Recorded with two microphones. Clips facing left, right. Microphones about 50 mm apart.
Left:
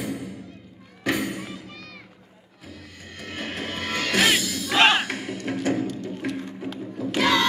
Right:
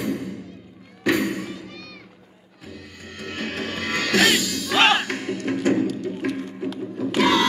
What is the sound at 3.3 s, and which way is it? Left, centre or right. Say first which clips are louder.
Music: right 2 dB; centre.